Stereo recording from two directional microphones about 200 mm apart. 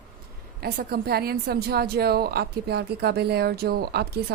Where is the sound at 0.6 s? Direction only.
50° right (ahead or behind).